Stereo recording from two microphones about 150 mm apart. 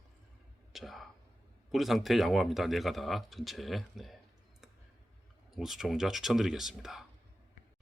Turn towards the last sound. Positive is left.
turn(degrees=0)  # may be behind; listen again after turning